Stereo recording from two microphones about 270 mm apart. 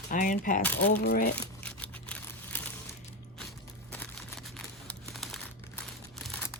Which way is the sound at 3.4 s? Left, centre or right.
Centre.